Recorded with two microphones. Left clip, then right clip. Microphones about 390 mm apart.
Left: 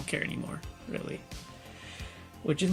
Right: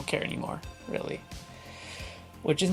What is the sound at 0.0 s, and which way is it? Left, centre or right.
Speech, centre.